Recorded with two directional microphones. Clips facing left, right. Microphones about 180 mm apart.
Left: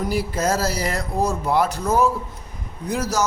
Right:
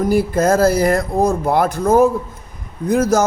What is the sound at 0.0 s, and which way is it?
Mantra, 50° right (ahead or behind).